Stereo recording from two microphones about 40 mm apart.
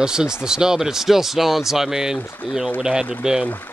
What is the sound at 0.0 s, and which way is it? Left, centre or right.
Speech, centre.